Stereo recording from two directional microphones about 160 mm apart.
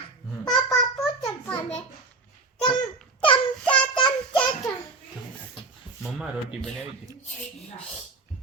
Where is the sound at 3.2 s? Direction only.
35° left (ahead or behind).